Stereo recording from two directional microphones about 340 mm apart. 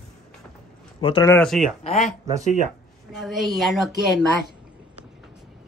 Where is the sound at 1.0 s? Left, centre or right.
Centre.